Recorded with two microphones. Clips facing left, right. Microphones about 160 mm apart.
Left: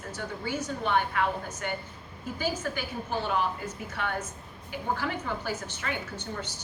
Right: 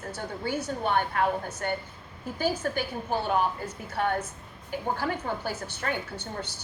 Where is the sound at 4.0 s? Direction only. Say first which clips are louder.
Right 6 dB; 45° right (ahead or behind).